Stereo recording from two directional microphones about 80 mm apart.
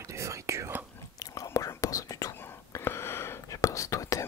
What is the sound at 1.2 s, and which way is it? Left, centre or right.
Whispering, left.